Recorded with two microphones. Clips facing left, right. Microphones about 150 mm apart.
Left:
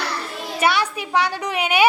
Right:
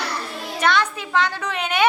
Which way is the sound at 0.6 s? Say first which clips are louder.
Even; 10° left (ahead or behind).